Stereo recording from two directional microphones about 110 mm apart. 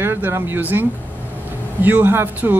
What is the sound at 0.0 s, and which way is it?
A man's voice, 20° right (ahead or behind).